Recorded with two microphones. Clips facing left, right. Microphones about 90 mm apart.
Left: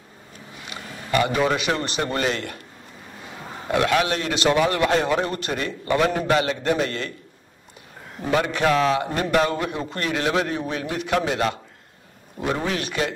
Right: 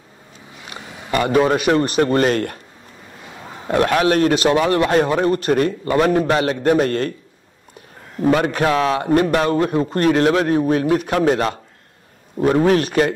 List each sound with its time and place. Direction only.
0.7 s a man's voice: 45° right (ahead or behind)
3.6 s a man's voice: 45° right (ahead or behind)
8.2 s a man's voice: 45° right (ahead or behind)